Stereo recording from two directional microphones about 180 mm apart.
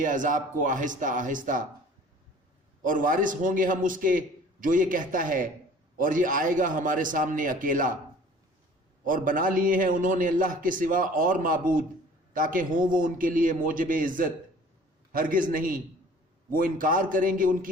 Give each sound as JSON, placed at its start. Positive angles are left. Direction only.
{"t": 0.0, "sound": "a man's voice", "side_deg": -45}
{"t": 2.8, "sound": "a man's voice", "side_deg": -50}
{"t": 9.0, "sound": "a man's voice", "side_deg": -50}